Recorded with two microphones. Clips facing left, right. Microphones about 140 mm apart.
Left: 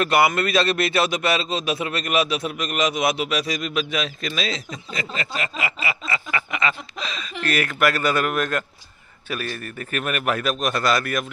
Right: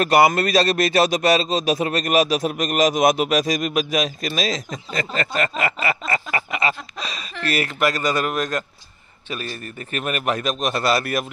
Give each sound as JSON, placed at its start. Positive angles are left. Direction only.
{"t": 0.0, "sound": "a man's voice", "side_deg": -40}
{"t": 8.0, "sound": "a man's voice", "side_deg": 5}
{"t": 9.9, "sound": "speech", "side_deg": -35}